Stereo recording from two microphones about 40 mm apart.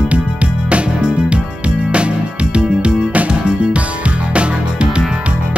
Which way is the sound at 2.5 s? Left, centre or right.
Right.